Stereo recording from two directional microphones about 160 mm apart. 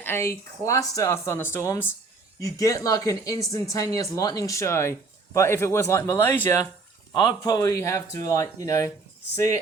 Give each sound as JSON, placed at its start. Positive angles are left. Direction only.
{"t": 0.0, "sound": "speech", "side_deg": 15}